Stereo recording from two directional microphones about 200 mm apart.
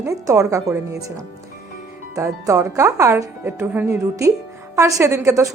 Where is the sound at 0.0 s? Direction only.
15° right (ahead or behind).